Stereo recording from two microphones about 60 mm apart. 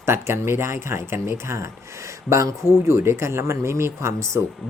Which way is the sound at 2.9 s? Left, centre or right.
Right.